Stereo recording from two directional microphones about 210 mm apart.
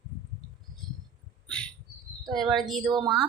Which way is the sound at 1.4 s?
5° left (ahead or behind).